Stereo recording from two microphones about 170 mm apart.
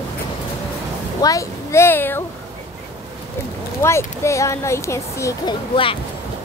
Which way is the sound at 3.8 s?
15° left (ahead or behind).